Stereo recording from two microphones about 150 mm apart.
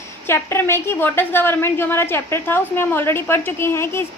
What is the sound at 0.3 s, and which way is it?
A woman's voice, 15° left (ahead or behind).